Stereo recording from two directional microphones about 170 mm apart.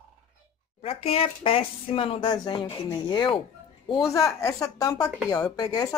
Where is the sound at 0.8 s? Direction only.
35° left (ahead or behind).